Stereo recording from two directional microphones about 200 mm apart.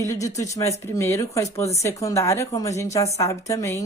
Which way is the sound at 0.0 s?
15° left (ahead or behind).